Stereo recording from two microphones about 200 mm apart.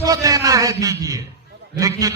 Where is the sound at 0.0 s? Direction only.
15° right (ahead or behind).